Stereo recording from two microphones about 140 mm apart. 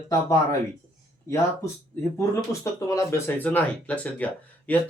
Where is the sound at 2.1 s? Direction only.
20° left (ahead or behind).